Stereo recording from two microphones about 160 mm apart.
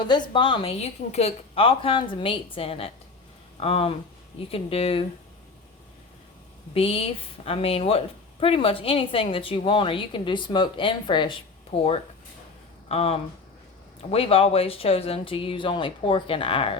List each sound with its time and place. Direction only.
0.0 s a woman's voice: 30° left (ahead or behind)
6.7 s a woman's voice: 35° left (ahead or behind)